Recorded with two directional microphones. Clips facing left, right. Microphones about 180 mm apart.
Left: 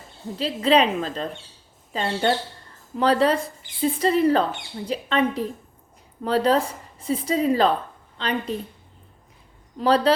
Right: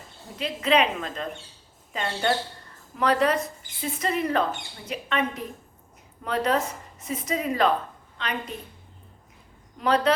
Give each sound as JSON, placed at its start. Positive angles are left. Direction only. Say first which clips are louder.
{"t": 0.3, "sound": "speech", "louder": "left 4 dB", "side_deg": 30}
{"t": 9.7, "sound": "speech", "louder": "left 3 dB", "side_deg": 30}